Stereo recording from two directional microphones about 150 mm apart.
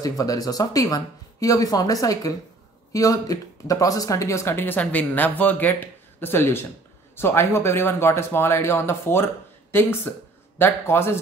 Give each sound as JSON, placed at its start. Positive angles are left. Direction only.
{"t": 0.0, "sound": "speech", "side_deg": 25}